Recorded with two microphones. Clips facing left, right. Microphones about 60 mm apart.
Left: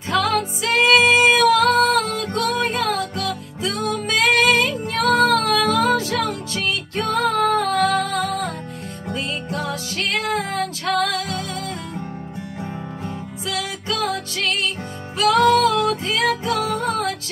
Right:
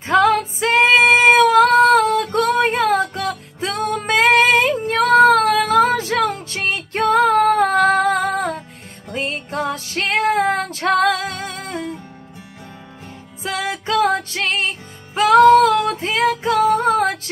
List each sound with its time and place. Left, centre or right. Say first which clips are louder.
0.1 s music: right 5 dB; right
13.4 s music: right 5 dB; right